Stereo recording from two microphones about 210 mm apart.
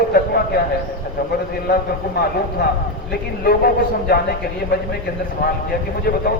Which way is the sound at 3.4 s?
45° left (ahead or behind).